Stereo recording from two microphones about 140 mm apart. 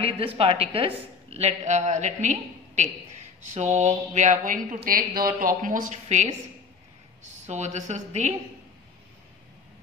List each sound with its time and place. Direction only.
0.0 s a woman's voice: 45° right (ahead or behind)
7.4 s a woman's voice: 55° right (ahead or behind)